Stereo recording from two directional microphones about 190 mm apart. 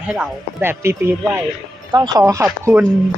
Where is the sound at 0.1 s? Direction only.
10° right (ahead or behind).